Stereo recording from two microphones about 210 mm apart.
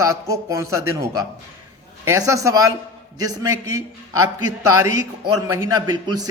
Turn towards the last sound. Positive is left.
turn(degrees=-20)  # may be behind; listen again after turning